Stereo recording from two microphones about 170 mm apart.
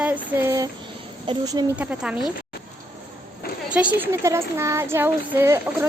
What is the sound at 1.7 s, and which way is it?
Speech, 5° right (ahead or behind).